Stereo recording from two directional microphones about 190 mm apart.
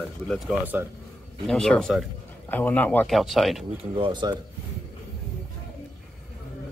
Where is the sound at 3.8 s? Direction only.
25° right (ahead or behind).